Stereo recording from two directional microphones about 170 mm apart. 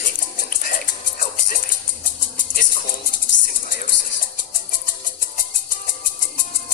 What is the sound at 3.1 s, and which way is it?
Music, 55° left (ahead or behind).